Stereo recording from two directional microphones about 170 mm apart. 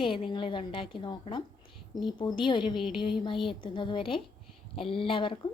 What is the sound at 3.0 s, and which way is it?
A woman's voice, 30° left (ahead or behind).